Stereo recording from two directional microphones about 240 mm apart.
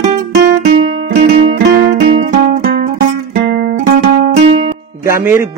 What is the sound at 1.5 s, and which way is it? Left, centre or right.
Music, right.